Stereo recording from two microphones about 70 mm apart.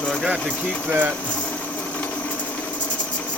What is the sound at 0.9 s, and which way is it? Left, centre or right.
Speech, right.